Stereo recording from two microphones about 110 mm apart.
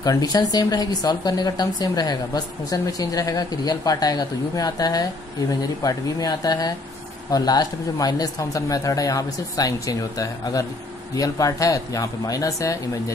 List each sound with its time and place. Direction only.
0.0 s speech: 35° left (ahead or behind)